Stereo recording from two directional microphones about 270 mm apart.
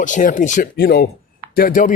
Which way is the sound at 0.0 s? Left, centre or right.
Left.